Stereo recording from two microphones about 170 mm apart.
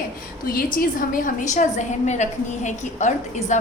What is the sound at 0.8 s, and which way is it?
A woman's voice, 55° left (ahead or behind).